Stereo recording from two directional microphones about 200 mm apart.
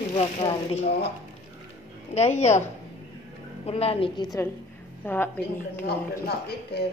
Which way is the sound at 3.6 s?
30° left (ahead or behind).